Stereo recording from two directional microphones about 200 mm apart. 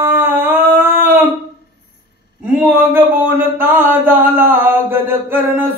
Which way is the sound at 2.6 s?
10° right (ahead or behind).